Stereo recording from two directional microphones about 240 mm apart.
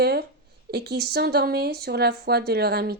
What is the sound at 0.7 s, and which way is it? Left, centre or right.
Speech, right.